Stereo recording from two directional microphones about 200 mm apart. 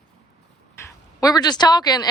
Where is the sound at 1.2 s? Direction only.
20° left (ahead or behind).